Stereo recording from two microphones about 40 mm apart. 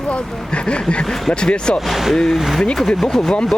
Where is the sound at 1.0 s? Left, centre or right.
Centre.